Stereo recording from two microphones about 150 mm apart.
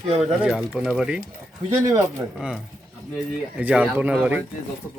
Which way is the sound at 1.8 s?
20° right (ahead or behind).